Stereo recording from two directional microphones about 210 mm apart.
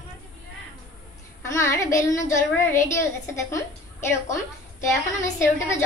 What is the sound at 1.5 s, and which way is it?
A woman's voice, 15° left (ahead or behind).